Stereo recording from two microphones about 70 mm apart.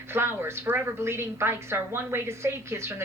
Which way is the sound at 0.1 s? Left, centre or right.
Right.